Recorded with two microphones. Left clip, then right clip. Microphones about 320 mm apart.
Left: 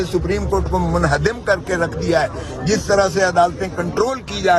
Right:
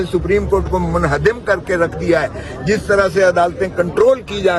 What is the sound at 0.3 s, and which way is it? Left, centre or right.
A man's voice, left.